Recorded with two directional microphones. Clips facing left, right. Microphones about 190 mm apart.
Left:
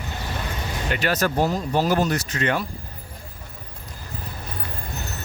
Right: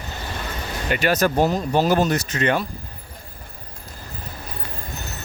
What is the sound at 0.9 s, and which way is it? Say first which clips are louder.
Speech: right 3 dB; 15° right (ahead or behind).